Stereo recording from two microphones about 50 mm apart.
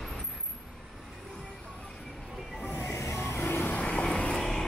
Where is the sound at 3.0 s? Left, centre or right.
Left.